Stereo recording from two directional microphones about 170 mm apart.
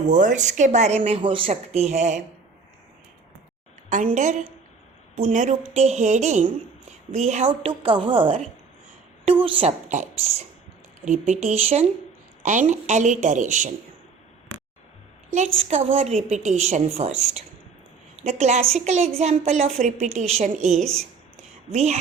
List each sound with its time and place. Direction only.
0.0 s a woman's voice: 45° right (ahead or behind)
3.8 s a woman's voice: 45° right (ahead or behind)
9.9 s a woman's voice: 45° right (ahead or behind)
15.3 s a woman's voice: 40° right (ahead or behind)
18.2 s a sound: 40° right (ahead or behind)
18.9 s a woman's voice: 40° right (ahead or behind)
20.7 s a woman's voice: 5° left (ahead or behind)
21.7 s a woman's voice: 40° right (ahead or behind)